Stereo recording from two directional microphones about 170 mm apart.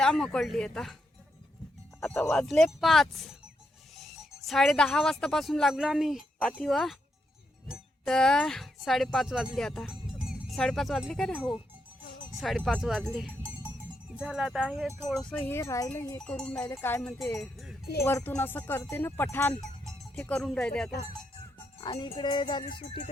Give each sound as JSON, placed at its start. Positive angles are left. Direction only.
{"t": 0.0, "sound": "speech", "side_deg": 5}
{"t": 2.0, "sound": "speech", "side_deg": 10}
{"t": 16.2, "sound": "speech", "side_deg": 5}
{"t": 21.8, "sound": "speech", "side_deg": 35}